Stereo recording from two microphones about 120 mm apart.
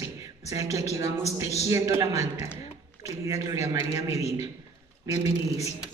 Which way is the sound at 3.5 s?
25° right (ahead or behind).